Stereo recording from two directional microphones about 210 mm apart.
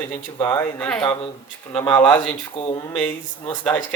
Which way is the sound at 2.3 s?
20° left (ahead or behind).